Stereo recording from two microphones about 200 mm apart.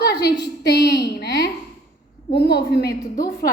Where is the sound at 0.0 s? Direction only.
55° left (ahead or behind).